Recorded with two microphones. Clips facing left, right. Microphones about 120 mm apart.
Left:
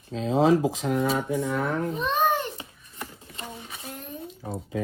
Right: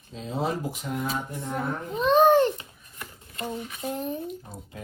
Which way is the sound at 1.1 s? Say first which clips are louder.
Left 5 dB; 75° left (ahead or behind).